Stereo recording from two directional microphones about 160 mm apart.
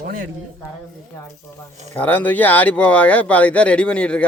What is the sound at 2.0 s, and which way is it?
Speech, 10° left (ahead or behind).